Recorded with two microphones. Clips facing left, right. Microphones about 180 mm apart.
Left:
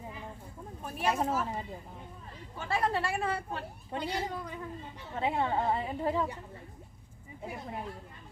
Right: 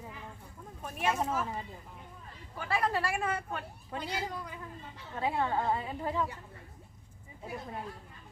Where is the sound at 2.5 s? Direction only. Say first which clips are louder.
Left 1 dB; 25° left (ahead or behind).